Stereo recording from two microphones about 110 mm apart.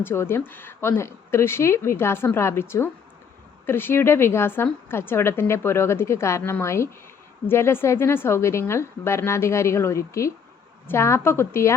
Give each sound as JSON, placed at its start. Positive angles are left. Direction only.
{"t": 0.0, "sound": "a woman's voice", "side_deg": 20}